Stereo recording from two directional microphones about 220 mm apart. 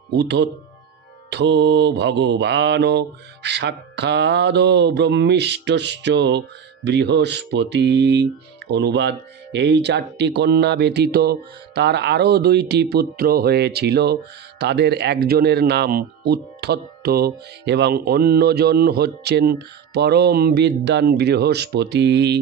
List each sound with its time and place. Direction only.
0.1 s mantra: 50° right (ahead or behind)